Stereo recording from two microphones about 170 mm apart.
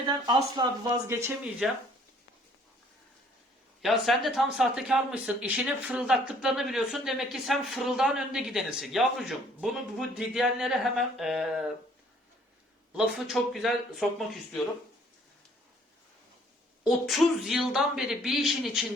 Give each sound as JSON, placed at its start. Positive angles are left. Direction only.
{"t": 0.3, "sound": "speech", "side_deg": -25}
{"t": 1.6, "sound": "speech", "side_deg": 0}
{"t": 3.8, "sound": "speech", "side_deg": 0}
{"t": 12.9, "sound": "speech", "side_deg": -5}
{"t": 16.8, "sound": "speech", "side_deg": 0}